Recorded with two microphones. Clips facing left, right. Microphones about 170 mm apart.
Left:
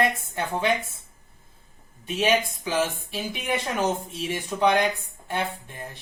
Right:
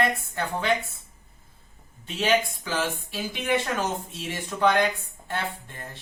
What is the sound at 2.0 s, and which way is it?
Speech, 15° left (ahead or behind).